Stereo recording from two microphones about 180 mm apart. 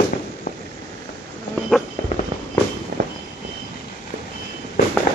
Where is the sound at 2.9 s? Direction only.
60° right (ahead or behind).